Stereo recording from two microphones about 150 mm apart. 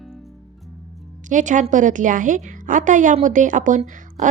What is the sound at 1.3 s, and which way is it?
Speech, 55° right (ahead or behind).